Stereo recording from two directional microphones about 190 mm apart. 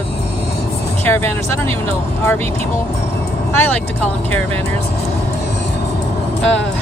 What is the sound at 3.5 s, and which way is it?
Speech, 10° left (ahead or behind).